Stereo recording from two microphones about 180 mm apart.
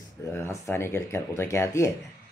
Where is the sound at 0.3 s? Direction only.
15° left (ahead or behind).